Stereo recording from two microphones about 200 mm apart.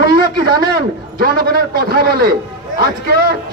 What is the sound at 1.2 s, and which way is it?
Speech, 50° right (ahead or behind).